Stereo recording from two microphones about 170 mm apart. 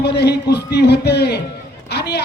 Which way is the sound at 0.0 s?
75° left (ahead or behind).